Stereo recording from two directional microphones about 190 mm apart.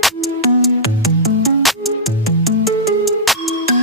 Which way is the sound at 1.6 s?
Centre (ahead or behind).